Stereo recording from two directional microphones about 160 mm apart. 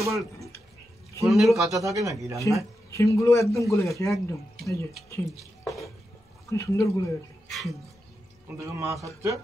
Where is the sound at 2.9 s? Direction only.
20° left (ahead or behind).